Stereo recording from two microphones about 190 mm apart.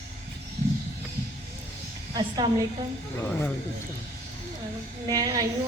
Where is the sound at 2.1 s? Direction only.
25° right (ahead or behind).